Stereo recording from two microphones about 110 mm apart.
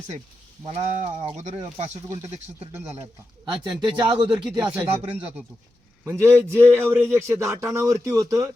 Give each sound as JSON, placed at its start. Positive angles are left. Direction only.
{"t": 0.7, "sound": "speech", "side_deg": -70}
{"t": 2.0, "sound": "a man's voice", "side_deg": -25}
{"t": 3.6, "sound": "speech", "side_deg": -45}
{"t": 4.5, "sound": "speech", "side_deg": -10}
{"t": 6.1, "sound": "a man's voice", "side_deg": -25}